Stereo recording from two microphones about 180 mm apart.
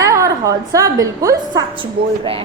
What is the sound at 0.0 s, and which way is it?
A woman's voice, 15° right (ahead or behind).